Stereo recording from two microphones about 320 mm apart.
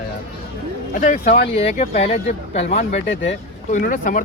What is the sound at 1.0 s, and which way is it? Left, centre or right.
Speech, left.